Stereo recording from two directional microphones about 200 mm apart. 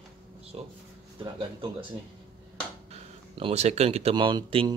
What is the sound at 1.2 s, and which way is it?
Speech, 25° right (ahead or behind).